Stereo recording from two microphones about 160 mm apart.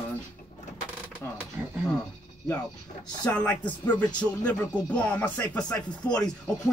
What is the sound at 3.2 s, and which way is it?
Speech, 10° left (ahead or behind).